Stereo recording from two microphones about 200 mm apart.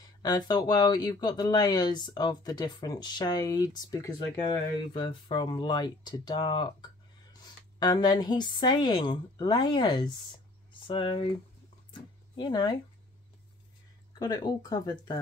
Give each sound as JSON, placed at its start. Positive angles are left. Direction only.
{"t": 0.2, "sound": "speech", "side_deg": 20}
{"t": 11.9, "sound": "a sound", "side_deg": 20}
{"t": 14.1, "sound": "speech", "side_deg": 20}